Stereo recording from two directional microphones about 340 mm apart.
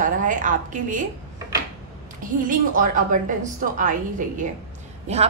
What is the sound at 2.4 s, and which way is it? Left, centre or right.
A woman's voice, right.